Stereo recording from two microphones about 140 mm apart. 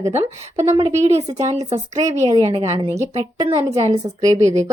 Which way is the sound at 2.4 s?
45° right (ahead or behind).